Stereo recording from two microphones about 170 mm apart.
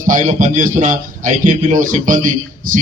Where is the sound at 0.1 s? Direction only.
50° right (ahead or behind).